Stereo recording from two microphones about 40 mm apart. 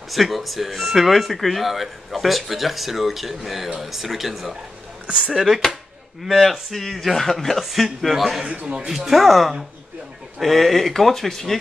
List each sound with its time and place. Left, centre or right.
0.1 s speech: centre
8.5 s a man's voice: right
8.7 s speech: centre